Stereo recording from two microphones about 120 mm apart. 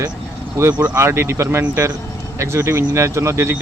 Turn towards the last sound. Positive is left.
turn(degrees=-25)  # may be behind; listen again after turning